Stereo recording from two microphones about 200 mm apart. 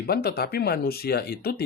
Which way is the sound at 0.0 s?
50° left (ahead or behind).